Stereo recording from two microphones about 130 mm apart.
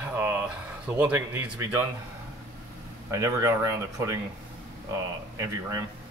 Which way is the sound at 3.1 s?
20° right (ahead or behind).